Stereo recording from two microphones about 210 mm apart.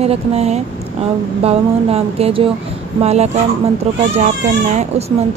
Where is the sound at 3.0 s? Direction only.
30° right (ahead or behind).